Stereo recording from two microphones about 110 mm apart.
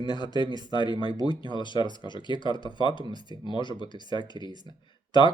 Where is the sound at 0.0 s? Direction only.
45° left (ahead or behind).